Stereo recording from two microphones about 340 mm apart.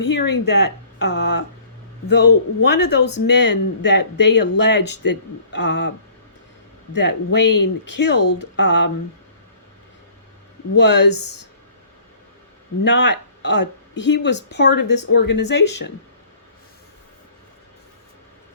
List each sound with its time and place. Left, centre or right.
0.0 s speech: left
6.9 s speech: left
10.9 s speech: left
12.8 s speech: left